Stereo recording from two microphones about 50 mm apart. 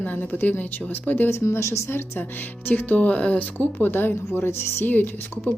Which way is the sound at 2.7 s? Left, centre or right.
Left.